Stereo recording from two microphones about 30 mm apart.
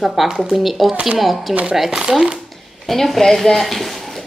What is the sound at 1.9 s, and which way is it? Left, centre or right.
Speech, centre.